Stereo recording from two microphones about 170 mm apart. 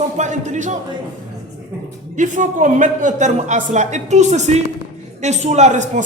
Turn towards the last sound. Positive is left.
turn(degrees=-45)  # may be behind; listen again after turning